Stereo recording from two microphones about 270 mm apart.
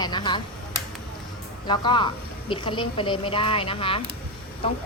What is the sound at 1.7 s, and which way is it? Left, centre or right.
A woman's voice, centre.